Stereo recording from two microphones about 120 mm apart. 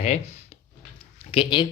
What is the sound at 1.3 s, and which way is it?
Speech, 40° left (ahead or behind).